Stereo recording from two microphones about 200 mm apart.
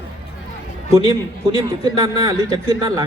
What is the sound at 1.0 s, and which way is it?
Speech, 20° right (ahead or behind).